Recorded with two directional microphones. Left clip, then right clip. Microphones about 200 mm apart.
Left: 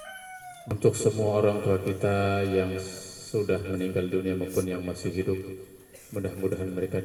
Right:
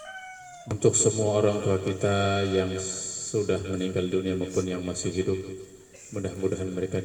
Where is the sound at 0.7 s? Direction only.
20° right (ahead or behind).